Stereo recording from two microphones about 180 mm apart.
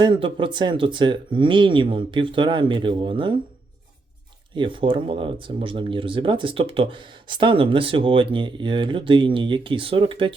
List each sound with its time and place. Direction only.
0.0 s speech: 25° right (ahead or behind)
4.5 s speech: 30° right (ahead or behind)